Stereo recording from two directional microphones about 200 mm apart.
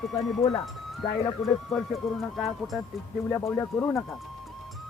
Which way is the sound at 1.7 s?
Centre (ahead or behind).